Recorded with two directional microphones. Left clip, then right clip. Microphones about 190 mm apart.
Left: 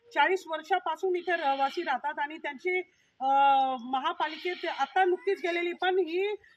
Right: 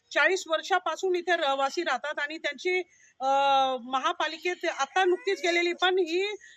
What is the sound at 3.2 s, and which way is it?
Speech, 10° right (ahead or behind).